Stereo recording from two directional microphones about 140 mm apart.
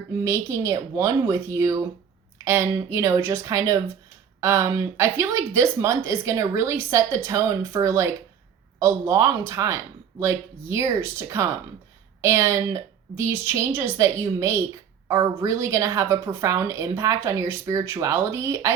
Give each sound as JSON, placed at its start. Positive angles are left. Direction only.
{"t": 0.3, "sound": "speech", "side_deg": -20}